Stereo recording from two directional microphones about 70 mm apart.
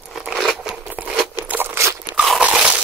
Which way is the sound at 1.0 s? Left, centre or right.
Right.